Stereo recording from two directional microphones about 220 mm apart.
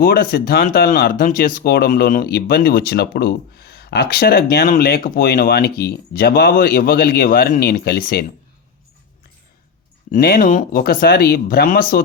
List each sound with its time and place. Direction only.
0.0 s speech: 45° left (ahead or behind)
10.1 s speech: 40° left (ahead or behind)